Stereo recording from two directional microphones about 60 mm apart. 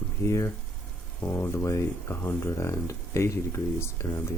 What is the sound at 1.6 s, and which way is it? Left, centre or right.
Speech, left.